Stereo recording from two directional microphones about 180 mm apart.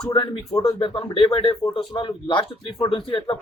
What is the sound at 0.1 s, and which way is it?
Speech, 20° left (ahead or behind).